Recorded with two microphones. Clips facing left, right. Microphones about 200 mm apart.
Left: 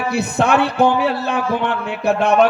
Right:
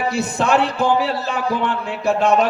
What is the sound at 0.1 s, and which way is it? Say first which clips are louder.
A man's voice: left 3 dB; 60° left (ahead or behind).